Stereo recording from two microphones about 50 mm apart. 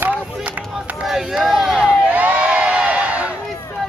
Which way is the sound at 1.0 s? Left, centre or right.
Centre.